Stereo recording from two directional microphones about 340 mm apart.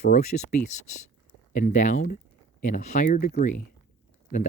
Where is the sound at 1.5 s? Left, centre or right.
Left.